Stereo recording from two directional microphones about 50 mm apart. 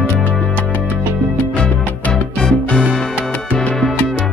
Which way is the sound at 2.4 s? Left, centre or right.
Centre.